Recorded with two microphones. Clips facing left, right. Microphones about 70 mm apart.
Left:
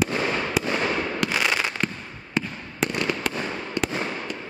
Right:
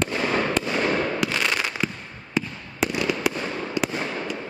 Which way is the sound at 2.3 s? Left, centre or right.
Centre.